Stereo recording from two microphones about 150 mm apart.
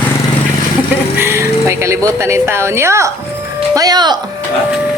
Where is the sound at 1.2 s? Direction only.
15° right (ahead or behind).